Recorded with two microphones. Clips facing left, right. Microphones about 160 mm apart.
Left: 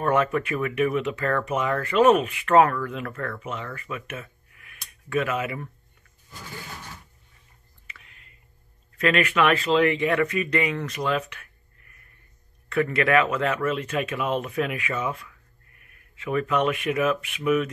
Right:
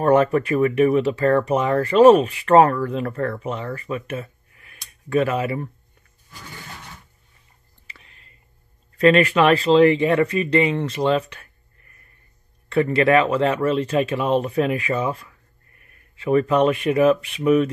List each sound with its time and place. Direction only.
0.0 s speech: 35° right (ahead or behind)
7.8 s a sound: 30° right (ahead or behind)
8.9 s speech: 30° right (ahead or behind)
12.6 s speech: 30° right (ahead or behind)